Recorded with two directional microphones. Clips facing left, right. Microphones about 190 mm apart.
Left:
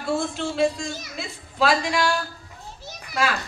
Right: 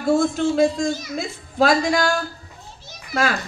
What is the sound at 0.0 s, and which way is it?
A man's voice, 40° right (ahead or behind).